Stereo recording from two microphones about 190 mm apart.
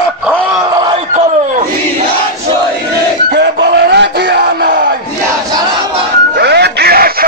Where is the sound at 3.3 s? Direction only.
65° right (ahead or behind).